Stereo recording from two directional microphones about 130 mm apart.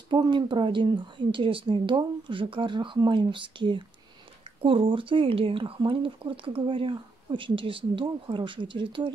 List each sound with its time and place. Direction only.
0.1 s speech: 35° right (ahead or behind)